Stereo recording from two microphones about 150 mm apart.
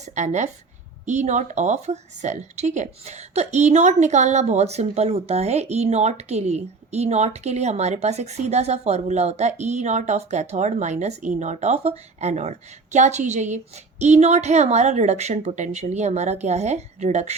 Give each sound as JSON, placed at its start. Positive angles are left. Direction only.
{"t": 0.0, "sound": "speech", "side_deg": -50}